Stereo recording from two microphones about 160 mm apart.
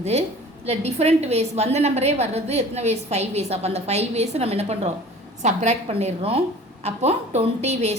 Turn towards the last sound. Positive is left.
turn(degrees=-45)  # may be behind; listen again after turning